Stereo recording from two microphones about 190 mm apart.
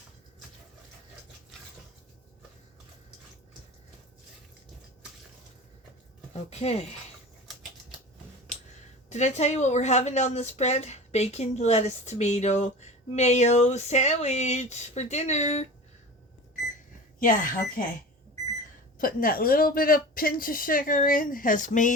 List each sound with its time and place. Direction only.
6.5 s speech: 35° left (ahead or behind)
9.0 s speech: 35° left (ahead or behind)
17.2 s speech: 45° left (ahead or behind)
18.9 s speech: 50° left (ahead or behind)